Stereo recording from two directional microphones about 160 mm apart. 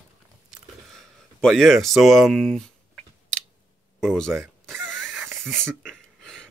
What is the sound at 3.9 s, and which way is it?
Speech, 5° left (ahead or behind).